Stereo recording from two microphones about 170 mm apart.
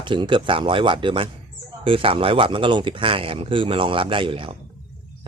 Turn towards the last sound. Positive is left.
turn(degrees=-30)  # may be behind; listen again after turning